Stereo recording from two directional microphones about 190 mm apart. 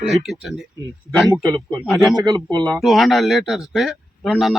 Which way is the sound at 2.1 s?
20° right (ahead or behind).